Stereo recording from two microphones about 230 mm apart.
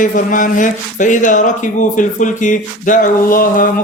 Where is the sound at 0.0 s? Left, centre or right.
Left.